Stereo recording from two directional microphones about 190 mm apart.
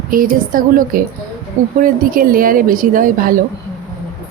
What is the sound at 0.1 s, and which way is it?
Speech, 50° right (ahead or behind).